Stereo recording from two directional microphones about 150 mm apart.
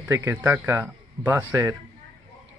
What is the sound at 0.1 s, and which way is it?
Speech, 15° right (ahead or behind).